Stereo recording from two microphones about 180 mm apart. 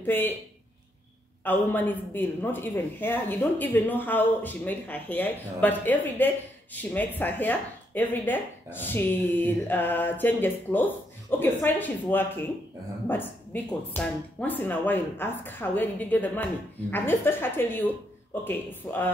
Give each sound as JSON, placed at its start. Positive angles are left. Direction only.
{"t": 0.0, "sound": "speech", "side_deg": 10}
{"t": 1.4, "sound": "speech", "side_deg": 10}